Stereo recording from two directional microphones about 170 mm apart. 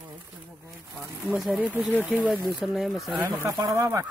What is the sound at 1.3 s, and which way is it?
Speech, 5° right (ahead or behind).